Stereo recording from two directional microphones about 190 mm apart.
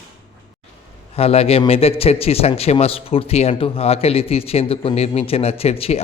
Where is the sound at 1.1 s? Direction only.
30° left (ahead or behind).